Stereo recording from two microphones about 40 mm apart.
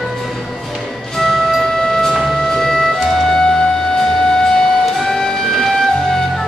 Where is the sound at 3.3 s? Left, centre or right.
Centre.